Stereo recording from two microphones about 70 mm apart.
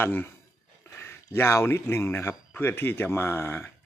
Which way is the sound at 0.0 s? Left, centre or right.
Left.